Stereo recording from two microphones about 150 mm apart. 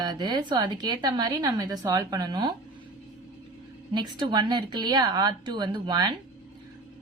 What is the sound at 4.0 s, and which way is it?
A woman's voice, 30° right (ahead or behind).